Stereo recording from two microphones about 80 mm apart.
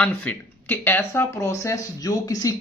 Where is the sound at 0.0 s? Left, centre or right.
Left.